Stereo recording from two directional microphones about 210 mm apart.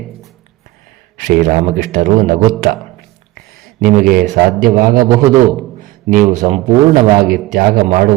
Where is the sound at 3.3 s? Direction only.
40° right (ahead or behind).